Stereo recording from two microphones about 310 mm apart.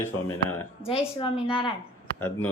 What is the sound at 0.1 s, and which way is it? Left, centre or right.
Speech, left.